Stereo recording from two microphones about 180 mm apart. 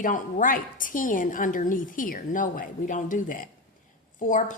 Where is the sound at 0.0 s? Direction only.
45° left (ahead or behind).